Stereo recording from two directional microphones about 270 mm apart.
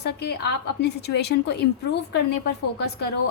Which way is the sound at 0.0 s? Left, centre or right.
Left.